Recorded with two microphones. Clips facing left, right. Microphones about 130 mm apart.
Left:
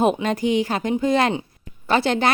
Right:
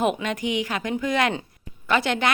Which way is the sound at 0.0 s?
35° left (ahead or behind).